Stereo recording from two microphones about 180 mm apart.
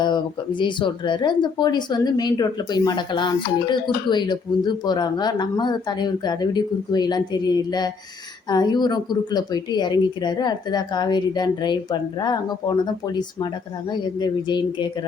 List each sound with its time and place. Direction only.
0.6 s speech: 25° left (ahead or behind)